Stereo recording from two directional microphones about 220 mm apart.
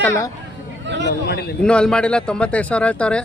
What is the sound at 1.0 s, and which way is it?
Speech, 50° left (ahead or behind).